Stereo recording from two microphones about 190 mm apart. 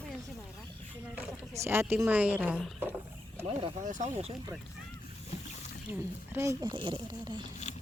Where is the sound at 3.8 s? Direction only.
40° right (ahead or behind).